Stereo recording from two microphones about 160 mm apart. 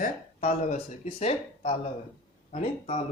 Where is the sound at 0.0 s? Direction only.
50° left (ahead or behind).